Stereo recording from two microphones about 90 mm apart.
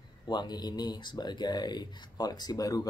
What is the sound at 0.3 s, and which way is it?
Speech, 50° left (ahead or behind).